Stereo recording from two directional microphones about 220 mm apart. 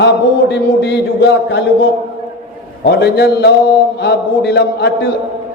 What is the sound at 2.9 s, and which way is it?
A man's voice, 50° left (ahead or behind).